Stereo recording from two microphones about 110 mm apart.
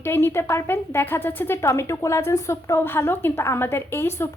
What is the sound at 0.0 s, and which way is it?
Speech, 20° left (ahead or behind).